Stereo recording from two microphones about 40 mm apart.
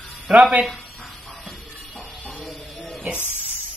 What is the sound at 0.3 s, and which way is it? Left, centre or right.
Speech, right.